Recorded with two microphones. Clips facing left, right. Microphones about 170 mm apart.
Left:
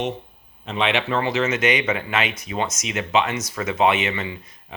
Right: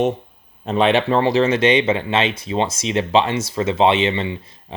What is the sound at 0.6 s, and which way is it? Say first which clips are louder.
Speech: right 7 dB; 40° right (ahead or behind).